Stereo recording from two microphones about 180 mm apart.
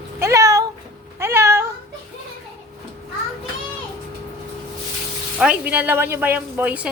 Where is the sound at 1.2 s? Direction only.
15° right (ahead or behind).